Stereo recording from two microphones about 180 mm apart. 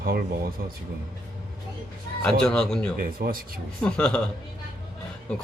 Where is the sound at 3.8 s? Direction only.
5° left (ahead or behind).